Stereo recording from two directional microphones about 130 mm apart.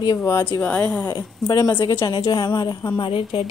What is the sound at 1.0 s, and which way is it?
Speech, 20° left (ahead or behind).